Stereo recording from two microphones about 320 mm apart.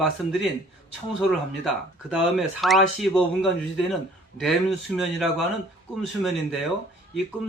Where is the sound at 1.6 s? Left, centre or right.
Centre.